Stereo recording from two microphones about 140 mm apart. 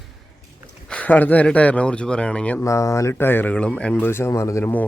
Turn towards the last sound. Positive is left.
turn(degrees=20)  # may be behind; listen again after turning